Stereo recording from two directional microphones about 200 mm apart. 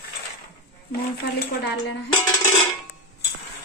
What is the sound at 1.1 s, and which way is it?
Speech, 55° left (ahead or behind).